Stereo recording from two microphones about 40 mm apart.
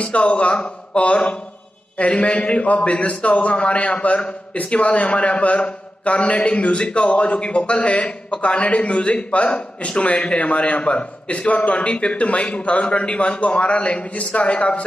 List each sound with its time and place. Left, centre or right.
0.0 s a man's voice: left